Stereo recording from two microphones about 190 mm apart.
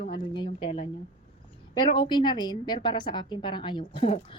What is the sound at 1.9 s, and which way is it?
A woman's voice, 25° left (ahead or behind).